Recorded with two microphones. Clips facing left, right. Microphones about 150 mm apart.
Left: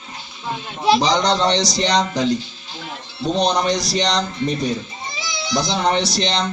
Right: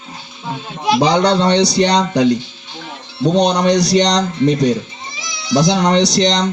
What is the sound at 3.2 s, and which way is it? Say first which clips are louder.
Speech: right 5 dB; 70° right (ahead or behind).